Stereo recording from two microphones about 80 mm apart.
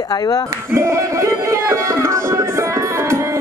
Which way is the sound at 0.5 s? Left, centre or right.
Right.